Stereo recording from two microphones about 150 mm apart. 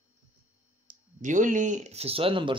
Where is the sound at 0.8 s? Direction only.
55° right (ahead or behind); by 2.6 s 35° right (ahead or behind).